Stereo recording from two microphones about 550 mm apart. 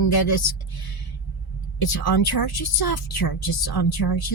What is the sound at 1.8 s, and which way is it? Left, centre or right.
Speech, left.